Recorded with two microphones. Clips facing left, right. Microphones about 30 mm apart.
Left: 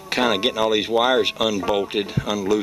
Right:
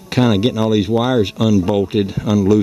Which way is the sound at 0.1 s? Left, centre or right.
Centre.